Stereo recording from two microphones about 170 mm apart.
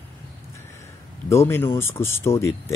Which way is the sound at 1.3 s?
15° left (ahead or behind).